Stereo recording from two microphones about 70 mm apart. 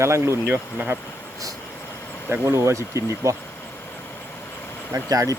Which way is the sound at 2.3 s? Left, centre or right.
Right.